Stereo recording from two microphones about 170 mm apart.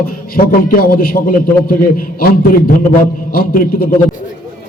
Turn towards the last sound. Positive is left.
turn(degrees=60)  # may be behind; listen again after turning